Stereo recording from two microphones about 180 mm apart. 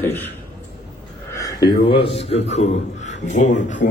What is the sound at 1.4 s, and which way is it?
A man's voice, 20° left (ahead or behind).